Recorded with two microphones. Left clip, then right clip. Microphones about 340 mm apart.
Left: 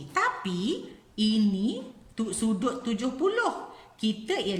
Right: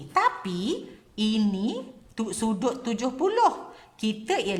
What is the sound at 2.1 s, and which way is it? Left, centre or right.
A woman's voice, centre.